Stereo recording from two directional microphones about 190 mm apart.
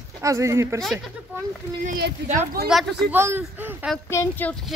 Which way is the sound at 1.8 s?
50° right (ahead or behind).